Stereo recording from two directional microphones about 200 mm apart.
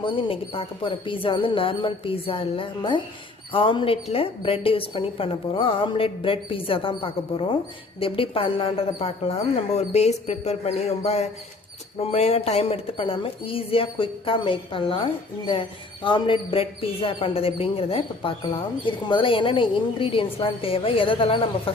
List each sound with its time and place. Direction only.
0.0 s speech: 25° left (ahead or behind)